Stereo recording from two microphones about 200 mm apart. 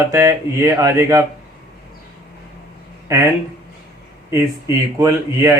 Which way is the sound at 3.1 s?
15° right (ahead or behind).